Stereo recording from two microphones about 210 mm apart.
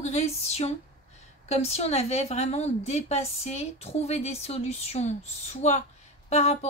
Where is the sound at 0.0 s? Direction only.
30° left (ahead or behind).